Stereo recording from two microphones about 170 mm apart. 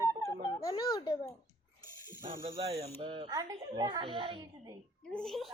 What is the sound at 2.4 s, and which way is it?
Music, 35° right (ahead or behind).